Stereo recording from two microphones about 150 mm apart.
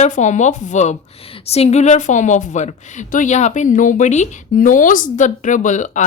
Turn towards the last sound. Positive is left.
turn(degrees=55)  # may be behind; listen again after turning